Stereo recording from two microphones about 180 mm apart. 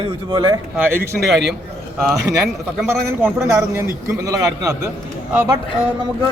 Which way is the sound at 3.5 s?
15° right (ahead or behind).